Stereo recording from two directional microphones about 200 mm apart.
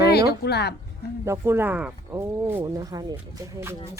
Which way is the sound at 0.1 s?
55° left (ahead or behind).